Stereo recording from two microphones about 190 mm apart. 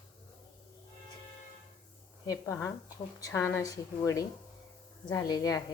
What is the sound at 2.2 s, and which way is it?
A woman's voice, 20° left (ahead or behind).